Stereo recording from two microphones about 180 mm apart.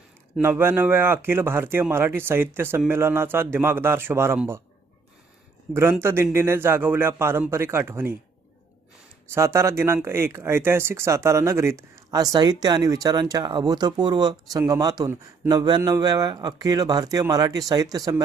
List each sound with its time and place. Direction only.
0.3 s speech: 10° right (ahead or behind)
5.7 s speech: 15° right (ahead or behind)
9.3 s a man's voice: 15° right (ahead or behind)